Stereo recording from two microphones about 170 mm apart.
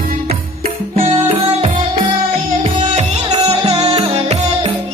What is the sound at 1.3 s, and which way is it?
Music, 30° right (ahead or behind).